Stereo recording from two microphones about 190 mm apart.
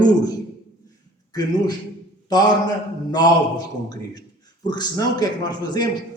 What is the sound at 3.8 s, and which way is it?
A man's voice, 20° left (ahead or behind).